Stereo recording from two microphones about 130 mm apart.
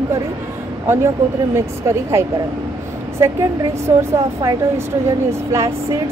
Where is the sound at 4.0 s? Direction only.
25° right (ahead or behind).